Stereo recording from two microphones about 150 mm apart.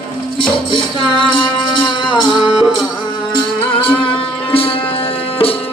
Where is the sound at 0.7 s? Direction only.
35° left (ahead or behind).